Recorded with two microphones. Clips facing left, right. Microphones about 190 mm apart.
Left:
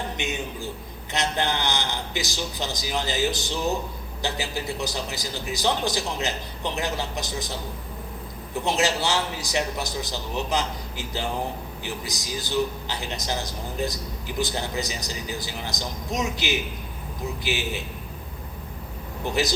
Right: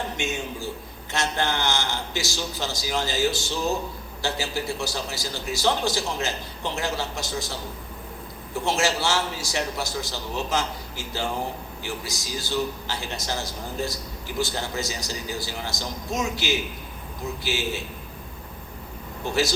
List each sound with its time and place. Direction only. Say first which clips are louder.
0.2 s a man's voice: right 1 dB; 20° left (ahead or behind)
8.5 s a man's voice: even; 20° left (ahead or behind)
19.2 s a man's voice: right 1 dB; 20° left (ahead or behind)